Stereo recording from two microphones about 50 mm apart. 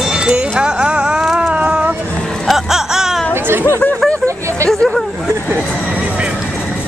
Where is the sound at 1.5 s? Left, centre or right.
Right.